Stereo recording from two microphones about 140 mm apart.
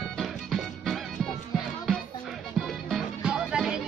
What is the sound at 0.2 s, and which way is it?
Music, centre (ahead or behind).